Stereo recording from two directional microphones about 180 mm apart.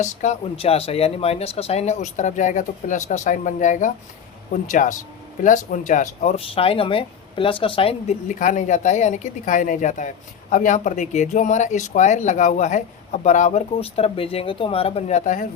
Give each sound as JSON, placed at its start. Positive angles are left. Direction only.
{"t": 0.0, "sound": "speech", "side_deg": 40}